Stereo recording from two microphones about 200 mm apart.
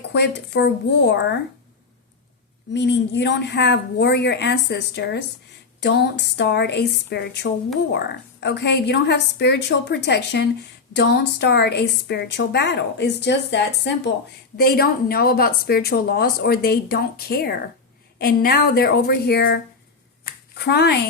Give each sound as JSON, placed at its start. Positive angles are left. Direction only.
{"t": 0.1, "sound": "a woman's voice", "side_deg": 60}
{"t": 2.7, "sound": "a woman's voice", "side_deg": 60}